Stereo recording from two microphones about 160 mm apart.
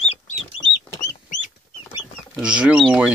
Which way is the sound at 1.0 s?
50° left (ahead or behind).